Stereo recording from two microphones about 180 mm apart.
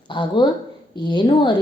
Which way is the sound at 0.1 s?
25° left (ahead or behind).